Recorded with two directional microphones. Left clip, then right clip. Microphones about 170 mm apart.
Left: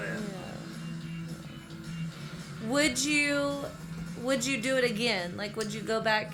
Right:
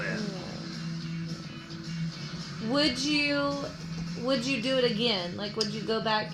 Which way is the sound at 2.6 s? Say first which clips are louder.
Even; 30° left (ahead or behind).